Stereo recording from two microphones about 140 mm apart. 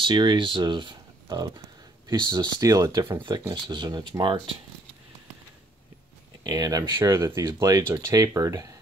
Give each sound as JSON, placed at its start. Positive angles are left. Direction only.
{"t": 0.0, "sound": "speech", "side_deg": -30}
{"t": 6.4, "sound": "speech", "side_deg": -25}